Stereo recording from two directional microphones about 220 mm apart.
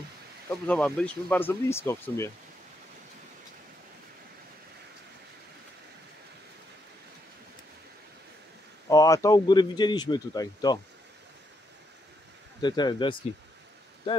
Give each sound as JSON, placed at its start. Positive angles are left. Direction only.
{"t": 0.7, "sound": "speech", "side_deg": 5}
{"t": 8.8, "sound": "speech", "side_deg": 15}
{"t": 12.6, "sound": "speech", "side_deg": 20}